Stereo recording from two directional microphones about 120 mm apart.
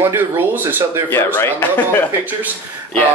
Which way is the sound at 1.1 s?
20° left (ahead or behind).